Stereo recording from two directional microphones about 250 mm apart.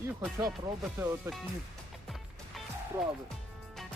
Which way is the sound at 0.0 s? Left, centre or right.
Centre.